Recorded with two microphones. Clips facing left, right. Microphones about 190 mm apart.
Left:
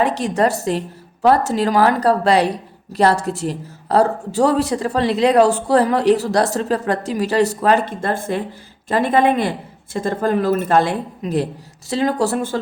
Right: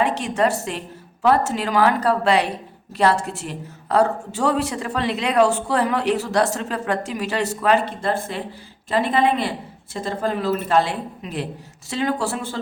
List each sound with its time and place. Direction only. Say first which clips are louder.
0.0 s a woman's voice: left 3 dB; 40° left (ahead or behind)